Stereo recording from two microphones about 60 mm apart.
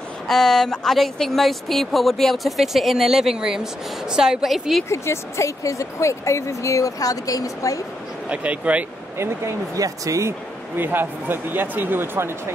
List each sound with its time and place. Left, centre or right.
0.3 s speech: centre
4.8 s speech: left
8.3 s speech: right
9.8 s speech: right
10.8 s speech: right